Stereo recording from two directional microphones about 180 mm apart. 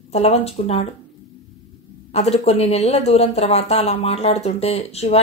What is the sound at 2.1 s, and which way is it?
Speech, 35° left (ahead or behind).